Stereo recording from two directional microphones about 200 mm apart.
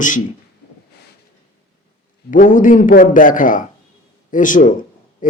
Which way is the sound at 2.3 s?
40° left (ahead or behind).